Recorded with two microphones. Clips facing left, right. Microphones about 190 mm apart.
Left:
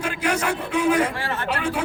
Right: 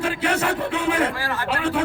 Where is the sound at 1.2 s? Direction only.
25° left (ahead or behind).